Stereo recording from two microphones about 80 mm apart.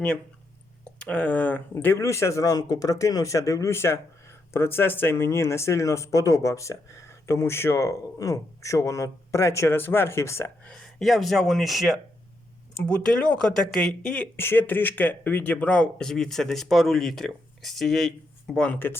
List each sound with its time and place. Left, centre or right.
0.9 s speech: centre; by 10.5 s left
11.0 s speech: centre
13.7 s speech: centre
14.3 s speech: left; by 18.6 s centre
18.6 s speech: left